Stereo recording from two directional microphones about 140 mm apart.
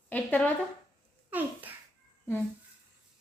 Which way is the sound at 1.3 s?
10° right (ahead or behind).